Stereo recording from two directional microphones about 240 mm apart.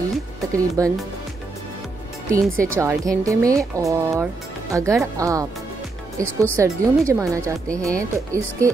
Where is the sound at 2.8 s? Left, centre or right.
Centre.